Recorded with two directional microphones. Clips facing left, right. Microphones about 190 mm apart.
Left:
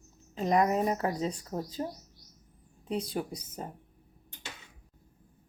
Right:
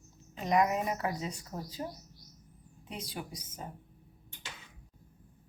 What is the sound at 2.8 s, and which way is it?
Speech, 35° left (ahead or behind).